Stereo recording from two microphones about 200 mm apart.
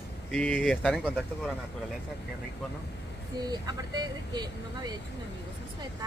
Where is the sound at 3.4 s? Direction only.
20° right (ahead or behind).